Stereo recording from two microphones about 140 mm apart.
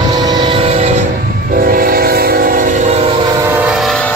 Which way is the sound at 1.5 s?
90° right.